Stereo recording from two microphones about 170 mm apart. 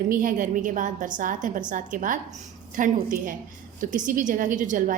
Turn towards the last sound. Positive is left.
turn(degrees=-50)  # may be behind; listen again after turning